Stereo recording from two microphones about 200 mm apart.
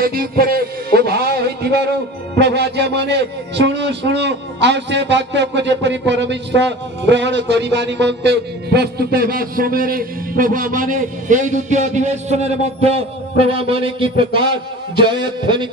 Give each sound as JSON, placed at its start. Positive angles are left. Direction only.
{"t": 0.0, "sound": "a man's voice", "side_deg": -50}